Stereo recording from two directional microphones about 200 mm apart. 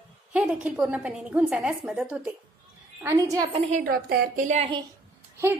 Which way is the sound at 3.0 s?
15° right (ahead or behind).